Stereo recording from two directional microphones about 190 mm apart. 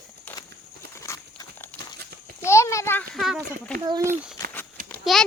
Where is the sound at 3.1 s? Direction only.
Centre (ahead or behind).